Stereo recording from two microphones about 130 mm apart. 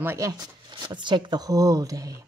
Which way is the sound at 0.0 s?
20° right (ahead or behind).